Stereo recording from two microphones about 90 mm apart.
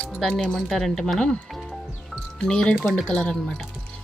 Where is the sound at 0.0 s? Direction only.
10° left (ahead or behind).